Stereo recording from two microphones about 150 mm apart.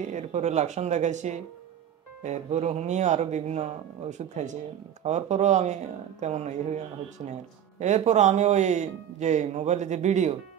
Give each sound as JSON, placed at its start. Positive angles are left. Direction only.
{"t": 0.1, "sound": "speech", "side_deg": -50}
{"t": 7.8, "sound": "speech", "side_deg": -50}